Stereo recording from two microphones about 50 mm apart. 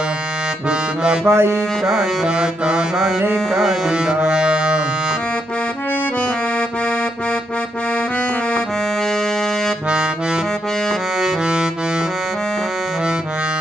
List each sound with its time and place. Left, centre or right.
0.7 s accordion: centre
1.2 s music: right
1.8 s music: centre
2.4 s music: centre
3.3 s music: centre
3.9 s music: centre